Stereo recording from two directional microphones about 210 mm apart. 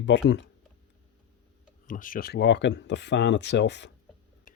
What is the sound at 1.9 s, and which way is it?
Speech, 40° left (ahead or behind).